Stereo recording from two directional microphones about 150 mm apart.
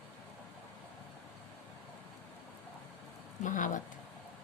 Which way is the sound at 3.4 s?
60° left (ahead or behind).